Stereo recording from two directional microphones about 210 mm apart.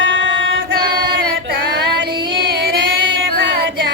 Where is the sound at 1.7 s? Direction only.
50° right (ahead or behind).